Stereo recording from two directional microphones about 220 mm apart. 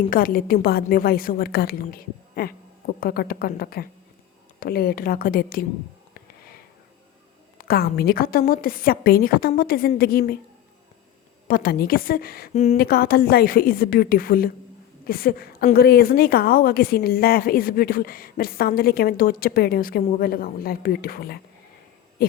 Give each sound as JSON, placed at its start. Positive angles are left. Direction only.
{"t": 0.1, "sound": "a woman's voice", "side_deg": 40}
{"t": 7.6, "sound": "a woman's voice", "side_deg": 45}
{"t": 11.4, "sound": "a woman's voice", "side_deg": 45}